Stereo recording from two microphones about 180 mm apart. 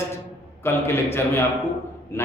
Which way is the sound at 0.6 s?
15° left (ahead or behind).